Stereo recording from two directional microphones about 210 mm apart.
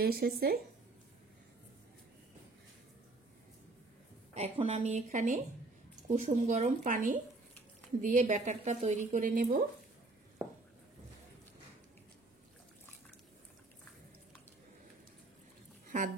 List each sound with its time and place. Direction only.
0.0 s speech: 45° right (ahead or behind)
4.3 s a woman's voice: 30° right (ahead or behind)
10.4 s a sound: 10° right (ahead or behind)